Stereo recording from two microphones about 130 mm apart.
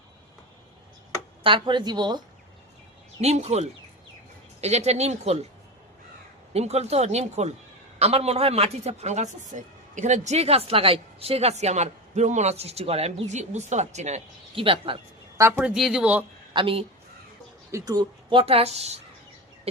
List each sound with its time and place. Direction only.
1.5 s speech: 40° right (ahead or behind)
3.2 s a woman's voice: 55° right (ahead or behind)
6.5 s a woman's voice: 55° right (ahead or behind)
14.5 s a woman's voice: 45° right (ahead or behind)
15.4 s a woman's voice: 20° right (ahead or behind)
15.6 s speech: 5° right (ahead or behind)
16.5 s speech: 40° right (ahead or behind)
17.7 s a woman's voice: 25° right (ahead or behind); by 18.9 s 55° right (ahead or behind)